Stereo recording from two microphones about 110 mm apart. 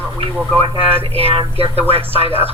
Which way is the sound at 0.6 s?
55° right (ahead or behind).